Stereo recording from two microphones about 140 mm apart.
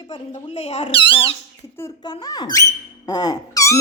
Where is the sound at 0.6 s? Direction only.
40° left (ahead or behind).